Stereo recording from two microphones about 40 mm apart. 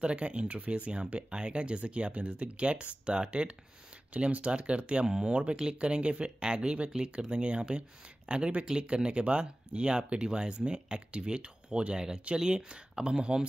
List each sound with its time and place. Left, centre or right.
0.0 s speech: right
5.0 s speech: centre
5.3 s speech: right